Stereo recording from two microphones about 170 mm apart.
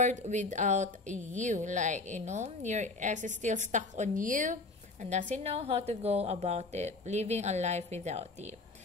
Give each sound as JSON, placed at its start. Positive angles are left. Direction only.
{"t": 0.0, "sound": "a woman's voice", "side_deg": -45}